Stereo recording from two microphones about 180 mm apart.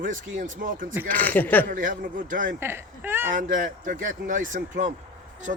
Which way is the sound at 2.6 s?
10° right (ahead or behind).